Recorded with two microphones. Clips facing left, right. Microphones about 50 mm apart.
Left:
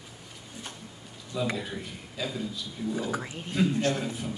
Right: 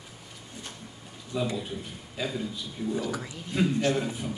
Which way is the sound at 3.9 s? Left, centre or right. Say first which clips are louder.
Right 2 dB; centre.